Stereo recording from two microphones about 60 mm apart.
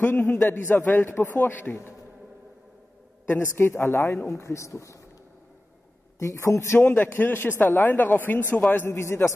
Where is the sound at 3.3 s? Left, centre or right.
Left.